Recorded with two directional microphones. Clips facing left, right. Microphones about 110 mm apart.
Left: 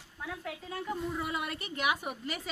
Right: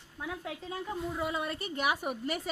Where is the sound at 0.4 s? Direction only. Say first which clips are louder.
Even; 20° right (ahead or behind).